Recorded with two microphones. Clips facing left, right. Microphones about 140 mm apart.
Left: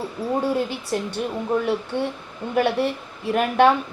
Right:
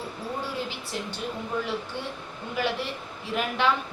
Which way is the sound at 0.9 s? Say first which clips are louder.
Left 8 dB; 50° left (ahead or behind).